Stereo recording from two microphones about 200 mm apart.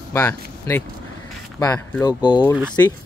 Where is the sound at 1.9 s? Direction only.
15° left (ahead or behind).